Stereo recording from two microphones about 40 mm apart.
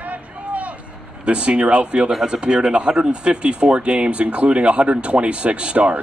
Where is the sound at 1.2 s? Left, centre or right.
Right.